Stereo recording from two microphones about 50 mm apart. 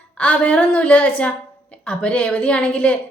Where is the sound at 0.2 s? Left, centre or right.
Left.